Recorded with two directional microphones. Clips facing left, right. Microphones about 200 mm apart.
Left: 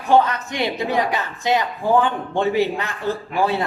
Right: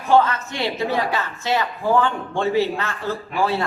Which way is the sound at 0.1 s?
15° left (ahead or behind).